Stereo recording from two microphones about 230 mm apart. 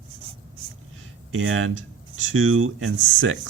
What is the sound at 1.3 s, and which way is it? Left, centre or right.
Speech, right.